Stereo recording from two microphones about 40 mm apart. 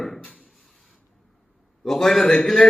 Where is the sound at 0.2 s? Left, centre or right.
Left.